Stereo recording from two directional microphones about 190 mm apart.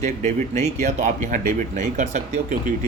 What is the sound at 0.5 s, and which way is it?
Speech, 35° right (ahead or behind).